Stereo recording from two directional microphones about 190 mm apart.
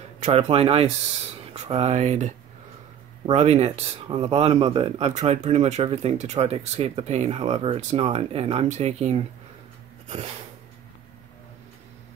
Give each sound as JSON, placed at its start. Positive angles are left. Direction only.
{"t": 0.2, "sound": "speech", "side_deg": -35}